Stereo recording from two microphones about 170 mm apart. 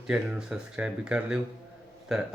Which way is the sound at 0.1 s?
5° right (ahead or behind).